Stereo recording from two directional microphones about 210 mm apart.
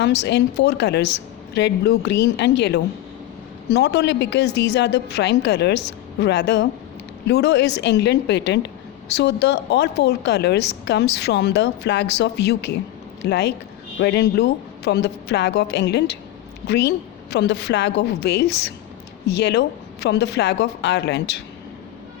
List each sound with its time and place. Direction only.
0.0 s a woman's voice: 55° left (ahead or behind)